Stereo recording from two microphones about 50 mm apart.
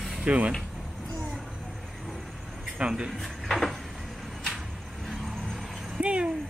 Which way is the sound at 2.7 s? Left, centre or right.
Centre.